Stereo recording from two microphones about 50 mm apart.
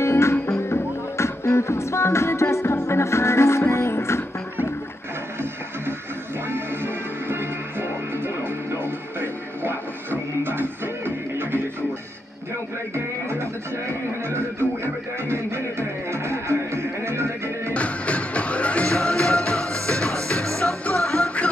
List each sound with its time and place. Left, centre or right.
0.0 s music: left
6.5 s music: right
12.9 s music: right
17.7 s music: left
18.9 s music: centre